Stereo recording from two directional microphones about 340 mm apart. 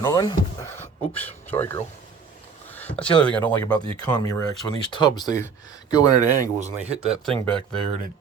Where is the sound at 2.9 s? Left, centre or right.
Left.